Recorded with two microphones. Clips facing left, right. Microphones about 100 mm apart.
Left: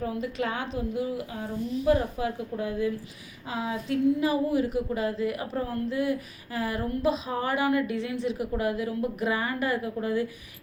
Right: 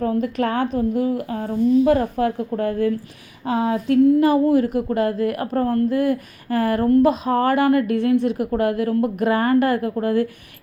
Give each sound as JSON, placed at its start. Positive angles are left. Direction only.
{"t": 0.0, "sound": "a woman's voice", "side_deg": -55}